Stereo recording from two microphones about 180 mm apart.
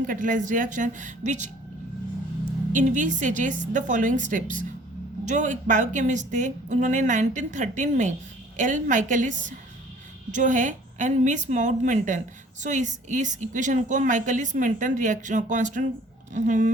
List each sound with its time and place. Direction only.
0.0 s a woman's voice: 45° right (ahead or behind)
2.7 s a woman's voice: 45° right (ahead or behind)